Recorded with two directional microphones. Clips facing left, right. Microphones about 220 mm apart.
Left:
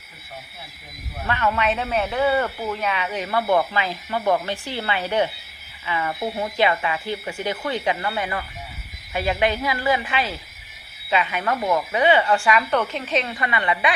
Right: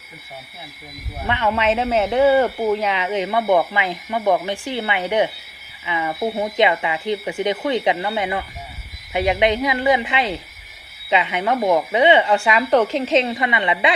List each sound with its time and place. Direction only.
1.3 s speech: 25° right (ahead or behind)